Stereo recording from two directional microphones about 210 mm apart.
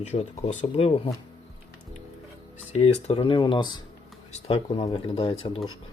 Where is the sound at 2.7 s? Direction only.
30° left (ahead or behind).